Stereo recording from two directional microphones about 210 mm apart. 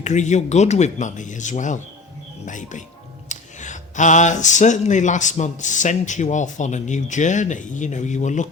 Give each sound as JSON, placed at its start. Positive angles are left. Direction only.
{"t": 0.0, "sound": "speech", "side_deg": 35}